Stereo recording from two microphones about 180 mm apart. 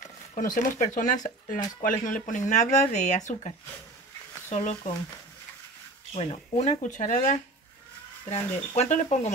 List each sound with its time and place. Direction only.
0.6 s speech: 45° left (ahead or behind)
6.1 s speech: 35° left (ahead or behind)